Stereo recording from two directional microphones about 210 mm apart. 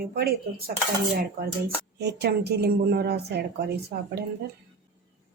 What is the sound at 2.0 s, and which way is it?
A woman's voice, 50° right (ahead or behind).